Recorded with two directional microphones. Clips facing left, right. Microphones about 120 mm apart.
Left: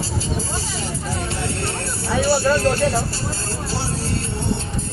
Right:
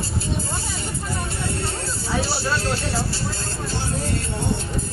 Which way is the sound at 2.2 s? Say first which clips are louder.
Left 11 dB; 55° left (ahead or behind).